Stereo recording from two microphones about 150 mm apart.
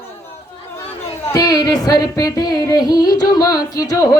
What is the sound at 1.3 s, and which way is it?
Music, 25° left (ahead or behind).